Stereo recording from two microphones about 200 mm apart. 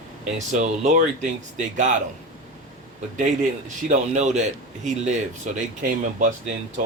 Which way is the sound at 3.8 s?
35° right (ahead or behind).